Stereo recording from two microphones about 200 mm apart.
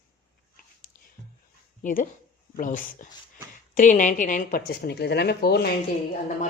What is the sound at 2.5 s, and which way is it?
Speech, 40° left (ahead or behind).